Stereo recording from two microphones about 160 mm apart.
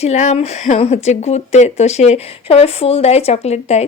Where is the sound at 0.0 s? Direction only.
45° left (ahead or behind).